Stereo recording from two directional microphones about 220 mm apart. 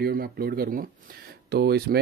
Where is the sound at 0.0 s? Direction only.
45° right (ahead or behind).